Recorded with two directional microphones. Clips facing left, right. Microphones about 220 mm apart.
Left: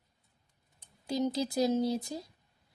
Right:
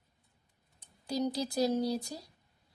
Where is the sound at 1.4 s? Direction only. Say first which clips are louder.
Left 1 dB; 20° left (ahead or behind).